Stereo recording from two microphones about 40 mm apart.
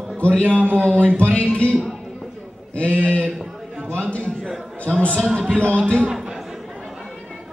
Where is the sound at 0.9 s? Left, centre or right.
Left.